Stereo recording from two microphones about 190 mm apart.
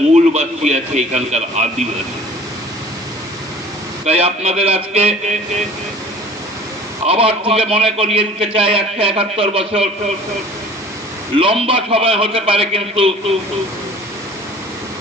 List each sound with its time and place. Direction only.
0.1 s a man's voice: 35° right (ahead or behind)
4.0 s a man's voice: 35° right (ahead or behind)
7.1 s a man's voice: 30° right (ahead or behind)
11.3 s a man's voice: 30° right (ahead or behind)